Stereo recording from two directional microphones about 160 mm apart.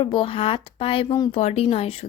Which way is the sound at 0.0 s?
30° left (ahead or behind).